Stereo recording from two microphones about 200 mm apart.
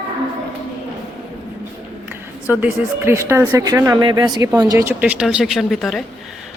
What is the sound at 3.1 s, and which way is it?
Speech, 10° right (ahead or behind).